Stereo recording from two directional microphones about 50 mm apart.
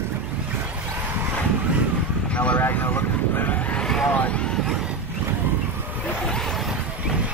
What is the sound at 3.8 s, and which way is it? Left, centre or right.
Vehicle, centre.